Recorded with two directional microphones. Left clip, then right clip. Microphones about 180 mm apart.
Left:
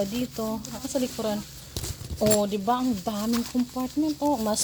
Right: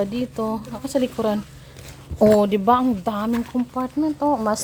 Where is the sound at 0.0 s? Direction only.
20° right (ahead or behind).